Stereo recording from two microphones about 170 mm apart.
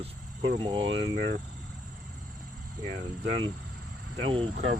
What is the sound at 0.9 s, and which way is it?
Speech, 60° right (ahead or behind).